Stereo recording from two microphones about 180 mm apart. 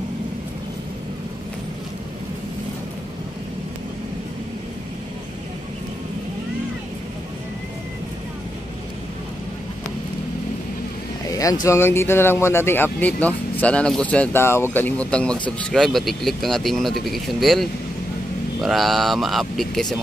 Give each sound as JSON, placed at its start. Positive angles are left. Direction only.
{"t": 11.2, "sound": "vehicle", "side_deg": 20}
{"t": 11.6, "sound": "speech", "side_deg": 15}